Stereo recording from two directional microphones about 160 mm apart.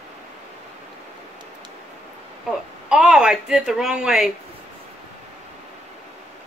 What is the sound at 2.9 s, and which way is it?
A woman's voice, 5° right (ahead or behind).